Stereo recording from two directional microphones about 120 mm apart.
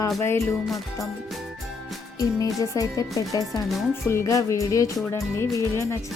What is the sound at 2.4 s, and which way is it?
A child's voice, 30° left (ahead or behind).